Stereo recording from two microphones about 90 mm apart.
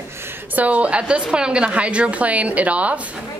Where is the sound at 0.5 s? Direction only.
15° right (ahead or behind).